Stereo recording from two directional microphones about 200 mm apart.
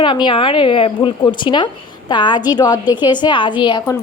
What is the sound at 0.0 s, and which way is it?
A woman's voice, 25° left (ahead or behind).